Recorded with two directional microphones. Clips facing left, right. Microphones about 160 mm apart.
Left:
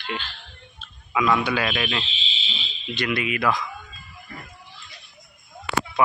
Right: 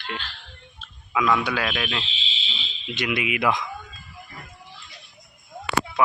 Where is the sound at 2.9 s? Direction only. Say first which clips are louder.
Even; 15° right (ahead or behind).